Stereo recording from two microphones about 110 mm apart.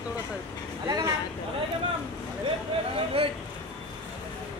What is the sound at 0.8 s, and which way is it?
Speech, 30° right (ahead or behind).